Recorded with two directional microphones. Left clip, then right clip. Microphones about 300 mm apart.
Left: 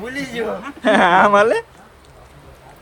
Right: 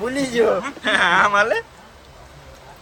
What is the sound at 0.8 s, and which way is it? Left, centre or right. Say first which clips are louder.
Speech: left 4 dB; centre.